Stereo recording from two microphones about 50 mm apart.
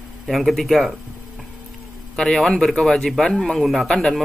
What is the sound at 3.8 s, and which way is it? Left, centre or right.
Speech, centre.